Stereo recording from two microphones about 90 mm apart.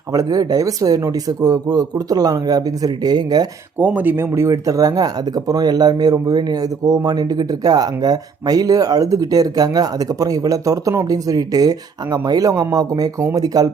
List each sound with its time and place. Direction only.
0.1 s speech: 40° right (ahead or behind)
3.8 s speech: 20° right (ahead or behind); by 13.7 s 45° right (ahead or behind)